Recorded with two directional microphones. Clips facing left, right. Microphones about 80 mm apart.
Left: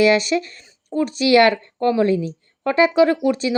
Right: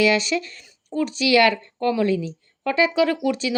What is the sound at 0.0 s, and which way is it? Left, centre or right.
A woman's voice, left.